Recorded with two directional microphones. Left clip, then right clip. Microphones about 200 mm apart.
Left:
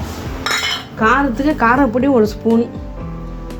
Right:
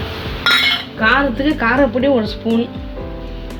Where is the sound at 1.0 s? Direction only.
40° left (ahead or behind).